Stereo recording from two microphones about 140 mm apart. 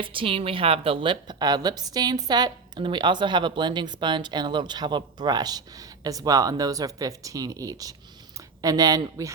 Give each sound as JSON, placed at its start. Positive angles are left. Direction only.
{"t": 0.0, "sound": "a woman's voice", "side_deg": -40}